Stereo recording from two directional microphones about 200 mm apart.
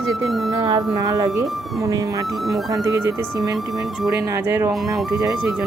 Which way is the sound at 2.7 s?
15° right (ahead or behind).